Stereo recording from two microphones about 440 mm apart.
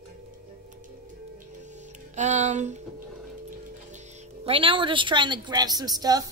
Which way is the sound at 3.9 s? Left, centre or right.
Centre.